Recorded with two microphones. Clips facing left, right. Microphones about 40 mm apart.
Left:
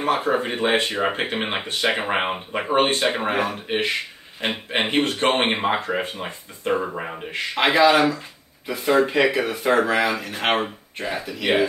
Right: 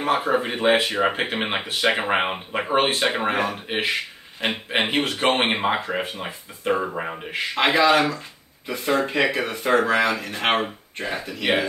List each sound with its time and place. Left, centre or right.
0.1 s speech: centre
5.0 s speech: right
5.4 s speech: centre